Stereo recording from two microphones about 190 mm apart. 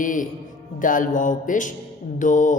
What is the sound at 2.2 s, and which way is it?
Mantra, 40° left (ahead or behind).